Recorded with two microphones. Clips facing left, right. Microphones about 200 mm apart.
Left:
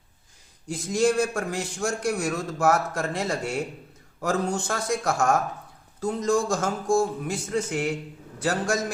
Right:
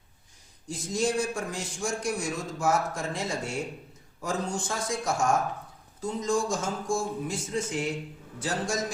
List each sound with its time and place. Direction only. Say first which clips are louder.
0.9 s a man's voice: left 5 dB; 65° left (ahead or behind)